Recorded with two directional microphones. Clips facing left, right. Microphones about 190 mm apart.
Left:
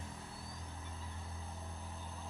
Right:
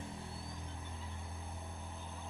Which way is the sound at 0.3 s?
5° right (ahead or behind).